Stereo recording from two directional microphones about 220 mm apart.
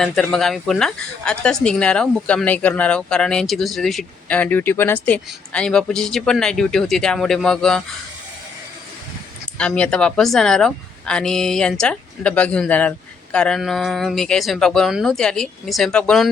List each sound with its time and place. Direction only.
0.0 s speech: centre (ahead or behind)
9.6 s speech: 5° left (ahead or behind)